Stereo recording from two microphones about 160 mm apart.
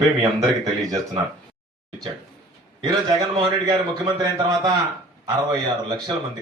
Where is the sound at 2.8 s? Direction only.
25° right (ahead or behind).